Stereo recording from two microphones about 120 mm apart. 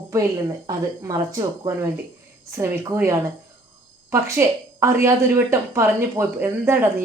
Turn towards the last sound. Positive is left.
turn(degrees=-20)  # may be behind; listen again after turning